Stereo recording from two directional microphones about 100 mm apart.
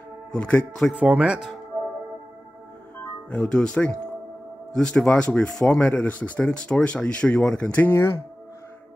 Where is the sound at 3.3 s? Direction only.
10° left (ahead or behind).